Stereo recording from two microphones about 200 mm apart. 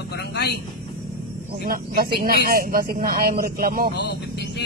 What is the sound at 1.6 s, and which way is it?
Speech, 50° right (ahead or behind).